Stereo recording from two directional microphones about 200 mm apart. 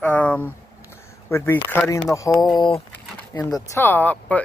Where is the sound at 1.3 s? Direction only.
10° left (ahead or behind).